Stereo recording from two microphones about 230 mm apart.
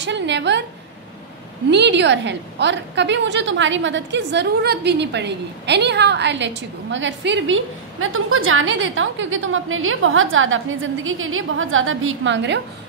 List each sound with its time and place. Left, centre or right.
0.0 s a woman's voice: right
1.7 s a woman's voice: right